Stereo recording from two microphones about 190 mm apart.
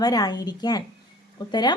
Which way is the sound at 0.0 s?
20° left (ahead or behind).